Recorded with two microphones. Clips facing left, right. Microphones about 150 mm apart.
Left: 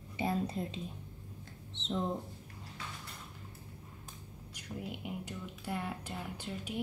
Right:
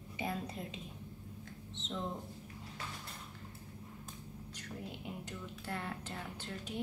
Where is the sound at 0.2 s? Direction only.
30° left (ahead or behind).